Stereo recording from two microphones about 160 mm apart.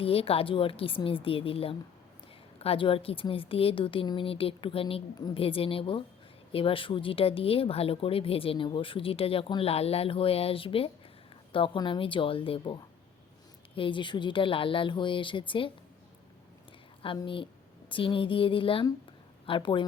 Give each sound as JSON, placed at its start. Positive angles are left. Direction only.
{"t": 0.0, "sound": "speech", "side_deg": 35}
{"t": 17.0, "sound": "a woman's voice", "side_deg": 30}